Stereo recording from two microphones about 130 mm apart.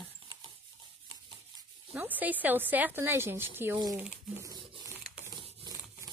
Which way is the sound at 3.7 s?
30° right (ahead or behind).